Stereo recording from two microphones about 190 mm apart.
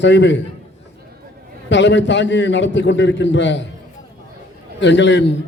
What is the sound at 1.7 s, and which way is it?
A man's voice, 70° left (ahead or behind).